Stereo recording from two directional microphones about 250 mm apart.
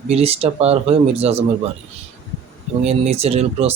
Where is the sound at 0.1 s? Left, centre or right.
Right.